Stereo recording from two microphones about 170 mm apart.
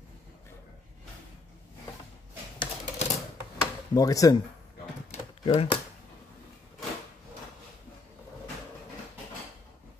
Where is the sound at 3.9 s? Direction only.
20° left (ahead or behind).